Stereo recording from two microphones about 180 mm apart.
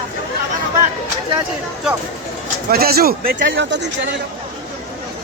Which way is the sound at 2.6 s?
60° right (ahead or behind).